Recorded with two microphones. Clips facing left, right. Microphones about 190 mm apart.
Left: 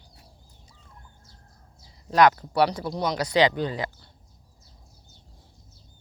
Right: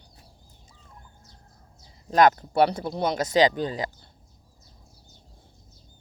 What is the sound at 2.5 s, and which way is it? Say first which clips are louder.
Speech: right 1 dB; 50° right (ahead or behind).